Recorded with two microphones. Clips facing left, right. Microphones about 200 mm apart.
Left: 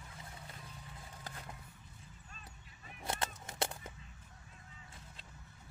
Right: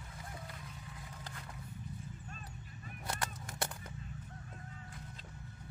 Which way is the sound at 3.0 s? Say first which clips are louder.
Left 2 dB; 25° left (ahead or behind).